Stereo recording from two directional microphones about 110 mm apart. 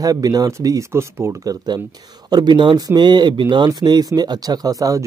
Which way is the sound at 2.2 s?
45° right (ahead or behind).